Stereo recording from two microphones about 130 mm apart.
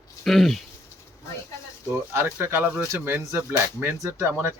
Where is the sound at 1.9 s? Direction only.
20° right (ahead or behind).